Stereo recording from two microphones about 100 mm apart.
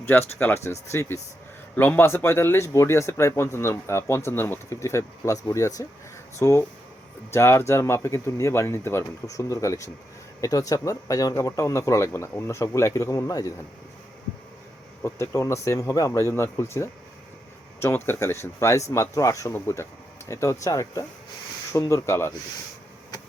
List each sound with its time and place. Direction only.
0.0 s speech: 20° left (ahead or behind)
15.0 s speech: 30° left (ahead or behind)